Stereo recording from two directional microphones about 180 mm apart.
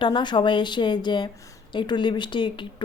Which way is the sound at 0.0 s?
25° left (ahead or behind).